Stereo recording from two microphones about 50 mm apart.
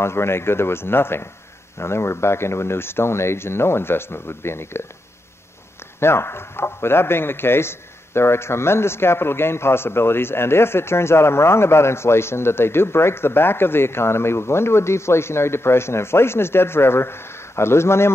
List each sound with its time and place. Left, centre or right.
0.0 s a man's voice: left
5.9 s a man's voice: left